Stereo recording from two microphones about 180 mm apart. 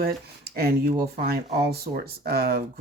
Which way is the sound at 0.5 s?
60° right (ahead or behind).